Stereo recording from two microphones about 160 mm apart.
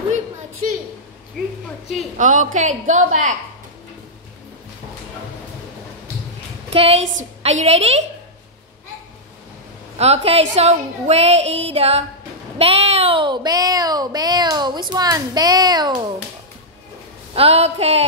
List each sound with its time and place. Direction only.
1.4 s a woman's voice: centre (ahead or behind)
2.1 s a woman's voice: 50° right (ahead or behind)
6.7 s a woman's voice: 40° right (ahead or behind)
9.9 s a woman's voice: 40° right (ahead or behind)
17.4 s a woman's voice: 40° right (ahead or behind)